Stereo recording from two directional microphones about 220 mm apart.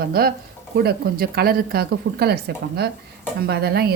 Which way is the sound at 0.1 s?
45° right (ahead or behind).